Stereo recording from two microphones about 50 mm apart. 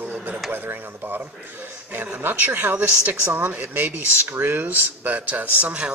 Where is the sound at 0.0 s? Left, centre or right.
Right.